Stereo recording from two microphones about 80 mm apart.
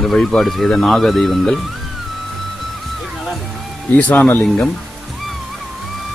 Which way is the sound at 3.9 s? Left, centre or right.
Left.